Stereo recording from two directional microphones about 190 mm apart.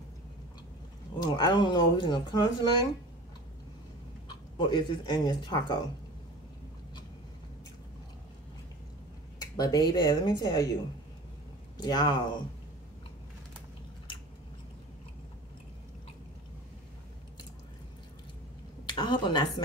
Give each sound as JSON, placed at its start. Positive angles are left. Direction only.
{"t": 1.2, "sound": "speech", "side_deg": 25}
{"t": 4.6, "sound": "speech", "side_deg": 25}
{"t": 9.4, "sound": "speech", "side_deg": 20}
{"t": 11.7, "sound": "speech", "side_deg": 20}
{"t": 18.9, "sound": "speech", "side_deg": 25}